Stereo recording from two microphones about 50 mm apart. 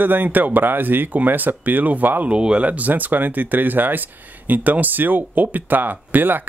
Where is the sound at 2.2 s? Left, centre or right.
Right.